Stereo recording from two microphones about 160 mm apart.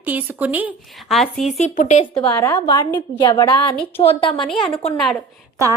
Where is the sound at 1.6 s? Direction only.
45° left (ahead or behind).